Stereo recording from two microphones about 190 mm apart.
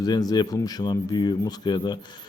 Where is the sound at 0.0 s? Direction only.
20° left (ahead or behind).